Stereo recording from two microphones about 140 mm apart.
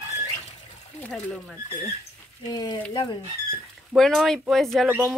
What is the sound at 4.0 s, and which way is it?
Speech, centre (ahead or behind).